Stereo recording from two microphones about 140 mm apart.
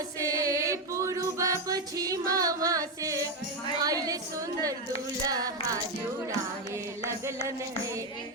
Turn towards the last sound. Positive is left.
turn(degrees=-20)  # may be behind; listen again after turning